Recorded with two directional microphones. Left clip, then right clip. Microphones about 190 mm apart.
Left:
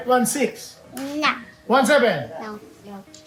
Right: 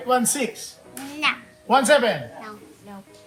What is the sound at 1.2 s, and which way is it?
Speech, 35° left (ahead or behind).